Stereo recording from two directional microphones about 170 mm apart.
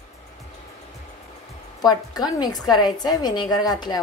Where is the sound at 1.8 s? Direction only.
25° left (ahead or behind).